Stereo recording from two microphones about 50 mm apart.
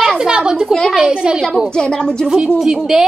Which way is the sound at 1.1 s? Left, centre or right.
Centre.